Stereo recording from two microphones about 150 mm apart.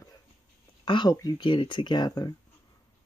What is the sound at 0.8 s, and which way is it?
Speech, 35° left (ahead or behind).